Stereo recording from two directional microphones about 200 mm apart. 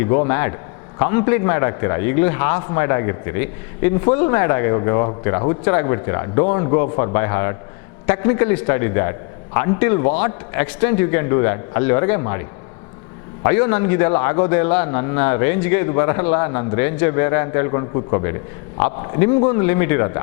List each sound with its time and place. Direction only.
0.0 s a man's voice: 15° left (ahead or behind)